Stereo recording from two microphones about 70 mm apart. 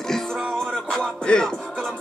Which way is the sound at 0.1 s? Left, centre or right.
Centre.